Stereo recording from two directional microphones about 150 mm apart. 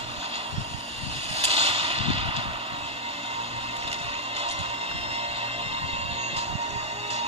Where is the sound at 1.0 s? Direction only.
40° right (ahead or behind).